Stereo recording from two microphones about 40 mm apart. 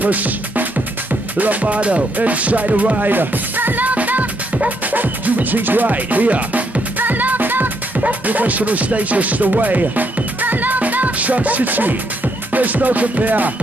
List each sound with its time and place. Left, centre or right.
0.0 s music: right
1.4 s speech: right
2.1 s music: right
8.0 s music: right